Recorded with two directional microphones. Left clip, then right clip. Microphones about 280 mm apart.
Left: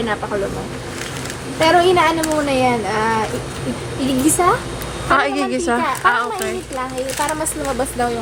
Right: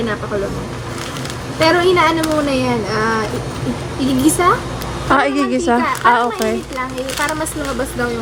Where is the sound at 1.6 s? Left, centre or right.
Centre.